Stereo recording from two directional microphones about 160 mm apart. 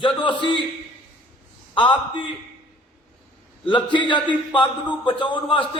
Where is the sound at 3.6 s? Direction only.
30° left (ahead or behind).